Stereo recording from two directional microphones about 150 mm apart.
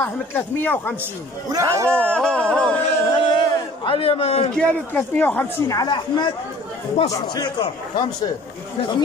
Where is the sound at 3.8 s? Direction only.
40° left (ahead or behind).